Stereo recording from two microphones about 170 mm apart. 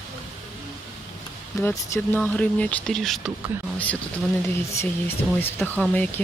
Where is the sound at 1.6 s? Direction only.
15° left (ahead or behind).